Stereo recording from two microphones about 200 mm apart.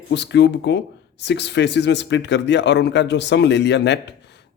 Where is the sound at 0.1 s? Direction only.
60° left (ahead or behind).